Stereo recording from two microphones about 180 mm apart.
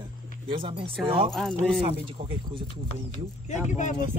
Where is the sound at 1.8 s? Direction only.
30° right (ahead or behind).